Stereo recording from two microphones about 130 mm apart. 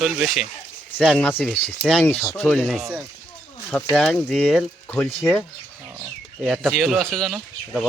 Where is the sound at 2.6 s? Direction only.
Centre (ahead or behind).